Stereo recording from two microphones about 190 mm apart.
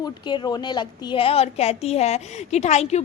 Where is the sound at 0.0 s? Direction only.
20° left (ahead or behind).